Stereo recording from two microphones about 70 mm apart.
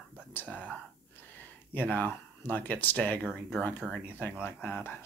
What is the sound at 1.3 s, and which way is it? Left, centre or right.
Speech, left.